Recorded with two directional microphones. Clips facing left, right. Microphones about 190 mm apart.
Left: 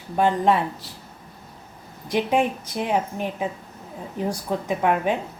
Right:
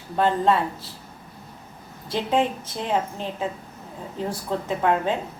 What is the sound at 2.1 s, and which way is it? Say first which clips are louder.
Speech: left 1 dB; 15° left (ahead or behind).